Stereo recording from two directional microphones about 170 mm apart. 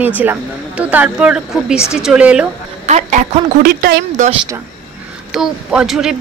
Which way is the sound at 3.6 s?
60° right (ahead or behind).